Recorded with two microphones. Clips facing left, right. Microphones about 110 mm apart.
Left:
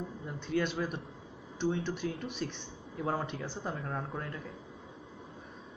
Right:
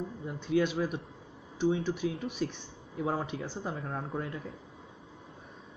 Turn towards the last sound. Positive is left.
turn(degrees=-5)  # may be behind; listen again after turning